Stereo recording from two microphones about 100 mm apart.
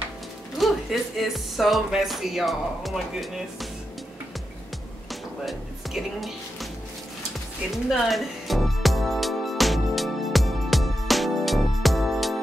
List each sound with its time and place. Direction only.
0.6 s speech: centre (ahead or behind)
5.4 s speech: centre (ahead or behind)
7.7 s music: centre (ahead or behind)